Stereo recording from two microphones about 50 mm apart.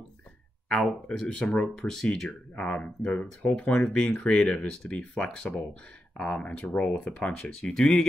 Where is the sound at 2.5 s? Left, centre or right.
Left.